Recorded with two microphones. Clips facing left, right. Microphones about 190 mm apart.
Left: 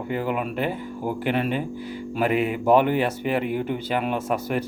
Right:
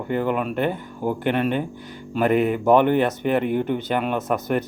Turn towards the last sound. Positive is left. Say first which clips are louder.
# right 2 dB
turn(degrees=5)  # may be behind; listen again after turning